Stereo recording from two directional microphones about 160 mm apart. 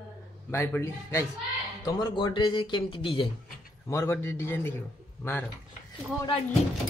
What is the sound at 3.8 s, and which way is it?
Speech, 15° left (ahead or behind).